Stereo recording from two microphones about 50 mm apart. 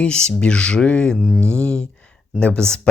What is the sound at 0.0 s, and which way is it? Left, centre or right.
Speech, centre.